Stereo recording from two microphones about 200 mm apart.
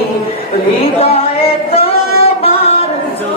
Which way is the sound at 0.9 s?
30° left (ahead or behind).